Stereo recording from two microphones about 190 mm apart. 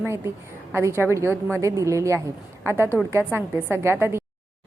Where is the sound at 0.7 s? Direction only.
15° right (ahead or behind).